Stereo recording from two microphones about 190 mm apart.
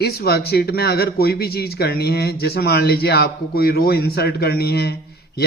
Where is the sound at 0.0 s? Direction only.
55° left (ahead or behind).